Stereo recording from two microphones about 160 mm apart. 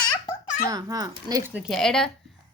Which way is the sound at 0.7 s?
25° right (ahead or behind).